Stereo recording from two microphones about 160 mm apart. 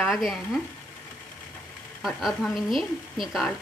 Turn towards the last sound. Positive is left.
turn(degrees=0)  # may be behind; listen again after turning